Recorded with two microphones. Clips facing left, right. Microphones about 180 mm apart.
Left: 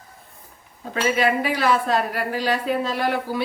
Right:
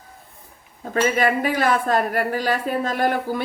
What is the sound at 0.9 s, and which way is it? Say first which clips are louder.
Speech: right 1 dB; 45° right (ahead or behind).